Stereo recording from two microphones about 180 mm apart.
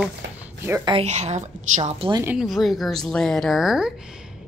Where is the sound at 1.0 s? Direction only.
40° right (ahead or behind).